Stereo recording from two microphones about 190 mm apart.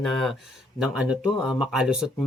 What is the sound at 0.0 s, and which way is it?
Speech, centre (ahead or behind).